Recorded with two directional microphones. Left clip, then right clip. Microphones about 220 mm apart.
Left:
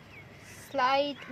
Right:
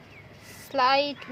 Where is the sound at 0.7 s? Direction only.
35° right (ahead or behind).